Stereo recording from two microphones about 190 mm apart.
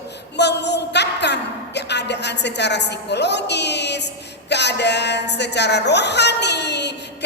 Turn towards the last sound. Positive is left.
turn(degrees=65)  # may be behind; listen again after turning